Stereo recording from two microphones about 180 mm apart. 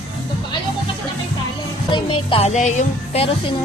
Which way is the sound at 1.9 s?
30° left (ahead or behind).